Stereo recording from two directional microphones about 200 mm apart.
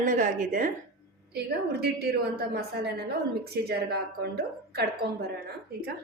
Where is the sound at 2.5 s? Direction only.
50° right (ahead or behind).